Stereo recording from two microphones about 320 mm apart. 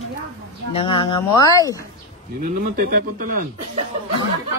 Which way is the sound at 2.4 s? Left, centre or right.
Right.